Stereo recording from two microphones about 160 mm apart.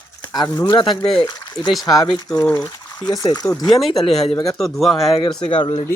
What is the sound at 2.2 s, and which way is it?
Speech, 10° left (ahead or behind).